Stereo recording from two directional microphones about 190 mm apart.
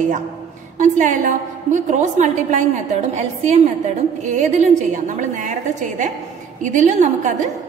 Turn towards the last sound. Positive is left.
turn(degrees=-40)  # may be behind; listen again after turning